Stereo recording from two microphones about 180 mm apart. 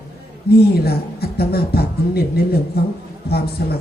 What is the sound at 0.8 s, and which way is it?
Speech, 60° left (ahead or behind).